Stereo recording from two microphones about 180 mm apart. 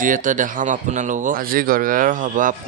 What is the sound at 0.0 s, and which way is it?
A man's voice, 45° right (ahead or behind).